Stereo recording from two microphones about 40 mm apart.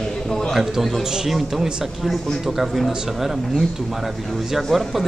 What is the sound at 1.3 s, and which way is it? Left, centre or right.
Speech, centre.